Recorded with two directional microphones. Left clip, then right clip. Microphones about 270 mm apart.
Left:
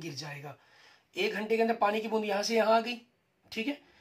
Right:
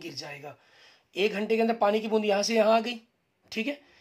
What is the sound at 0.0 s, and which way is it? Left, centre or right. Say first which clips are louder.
Speech: right 2 dB; right.